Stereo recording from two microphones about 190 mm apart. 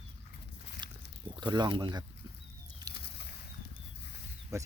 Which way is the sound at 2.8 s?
20° right (ahead or behind).